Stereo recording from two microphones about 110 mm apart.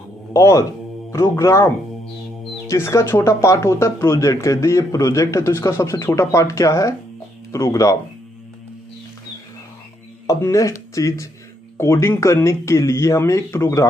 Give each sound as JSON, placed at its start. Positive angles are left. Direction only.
{"t": 0.3, "sound": "speech", "side_deg": 30}
{"t": 2.7, "sound": "speech", "side_deg": 25}
{"t": 10.2, "sound": "speech", "side_deg": 30}